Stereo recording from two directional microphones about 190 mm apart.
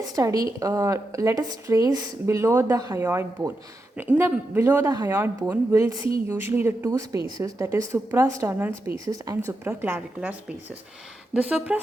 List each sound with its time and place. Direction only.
0.2 s speech: 15° right (ahead or behind)
11.4 s speech: 5° right (ahead or behind)